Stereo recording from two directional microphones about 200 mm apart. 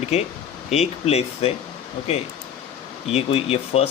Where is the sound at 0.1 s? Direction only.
30° left (ahead or behind).